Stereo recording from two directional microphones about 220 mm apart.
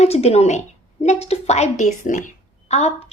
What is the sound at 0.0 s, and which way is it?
A woman's voice, 30° left (ahead or behind).